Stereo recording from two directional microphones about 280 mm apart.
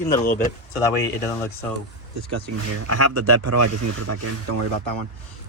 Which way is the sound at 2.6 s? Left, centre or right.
Right.